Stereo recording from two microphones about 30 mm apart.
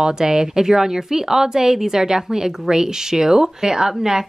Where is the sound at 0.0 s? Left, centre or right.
Right.